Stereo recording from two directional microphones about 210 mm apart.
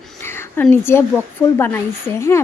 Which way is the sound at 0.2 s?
10° left (ahead or behind).